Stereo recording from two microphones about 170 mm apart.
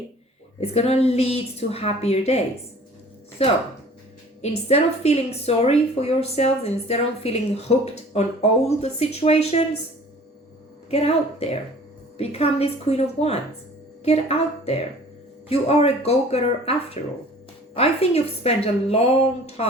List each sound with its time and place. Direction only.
0.6 s a woman's voice: 40° left (ahead or behind)
3.4 s a woman's voice: 35° left (ahead or behind)
10.9 s a woman's voice: 35° left (ahead or behind)